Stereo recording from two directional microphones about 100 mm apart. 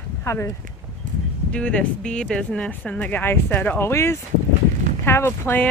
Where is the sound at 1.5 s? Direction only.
10° left (ahead or behind).